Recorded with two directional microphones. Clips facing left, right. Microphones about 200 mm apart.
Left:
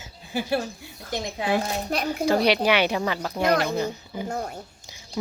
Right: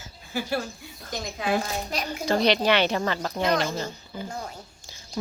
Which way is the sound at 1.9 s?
55° left (ahead or behind).